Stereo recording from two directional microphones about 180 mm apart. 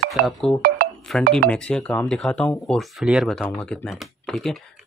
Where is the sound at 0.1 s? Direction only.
Centre (ahead or behind).